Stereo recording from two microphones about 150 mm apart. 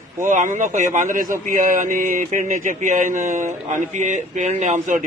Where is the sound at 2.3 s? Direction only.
55° right (ahead or behind).